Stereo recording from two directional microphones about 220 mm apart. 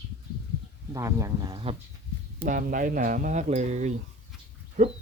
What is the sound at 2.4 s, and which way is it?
Speech, 35° right (ahead or behind).